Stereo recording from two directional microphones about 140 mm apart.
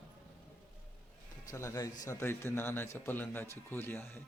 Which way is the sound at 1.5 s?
20° left (ahead or behind).